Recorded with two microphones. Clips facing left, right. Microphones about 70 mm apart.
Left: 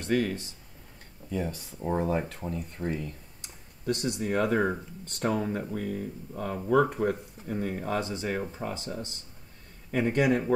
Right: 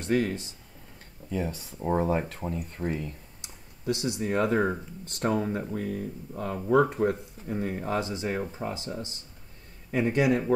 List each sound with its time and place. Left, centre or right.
0.0 s speech: right
1.8 s speech: centre
2.9 s speech: right
3.3 s a sound: centre
4.6 s speech: centre
5.2 s speech: centre
6.4 s speech: centre
6.7 s speech: centre
8.4 s speech: centre
8.6 s speech: right
9.9 s speech: centre